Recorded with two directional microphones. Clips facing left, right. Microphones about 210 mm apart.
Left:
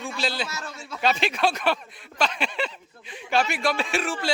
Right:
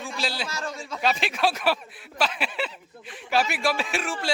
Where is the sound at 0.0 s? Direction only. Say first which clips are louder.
Left 2 dB; centre (ahead or behind).